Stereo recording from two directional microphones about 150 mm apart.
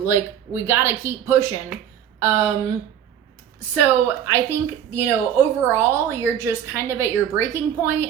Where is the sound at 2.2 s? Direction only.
20° right (ahead or behind).